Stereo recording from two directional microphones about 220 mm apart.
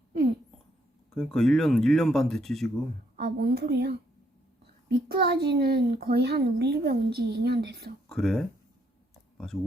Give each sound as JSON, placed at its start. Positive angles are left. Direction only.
{"t": 1.1, "sound": "speech", "side_deg": 0}
{"t": 3.2, "sound": "a woman's voice", "side_deg": -50}
{"t": 5.1, "sound": "a woman's voice", "side_deg": -45}
{"t": 8.1, "sound": "speech", "side_deg": 0}